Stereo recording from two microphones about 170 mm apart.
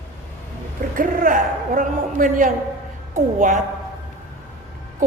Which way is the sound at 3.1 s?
50° right (ahead or behind).